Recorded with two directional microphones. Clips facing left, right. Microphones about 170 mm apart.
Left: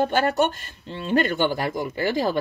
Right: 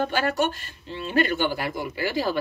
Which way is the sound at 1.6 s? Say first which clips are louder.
Left 3 dB; 45° left (ahead or behind).